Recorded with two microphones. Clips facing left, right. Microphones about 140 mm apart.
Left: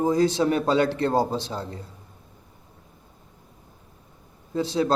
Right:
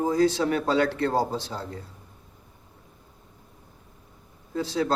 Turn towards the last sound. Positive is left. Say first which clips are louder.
# left 3 dB
turn(degrees=20)  # may be behind; listen again after turning